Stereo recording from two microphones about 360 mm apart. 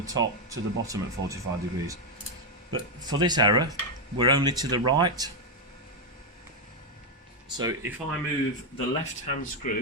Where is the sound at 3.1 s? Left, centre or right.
Centre.